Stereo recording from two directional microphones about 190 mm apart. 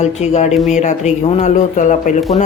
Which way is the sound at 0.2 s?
35° left (ahead or behind).